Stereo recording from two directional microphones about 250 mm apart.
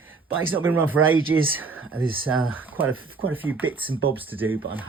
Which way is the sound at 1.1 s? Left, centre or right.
Right.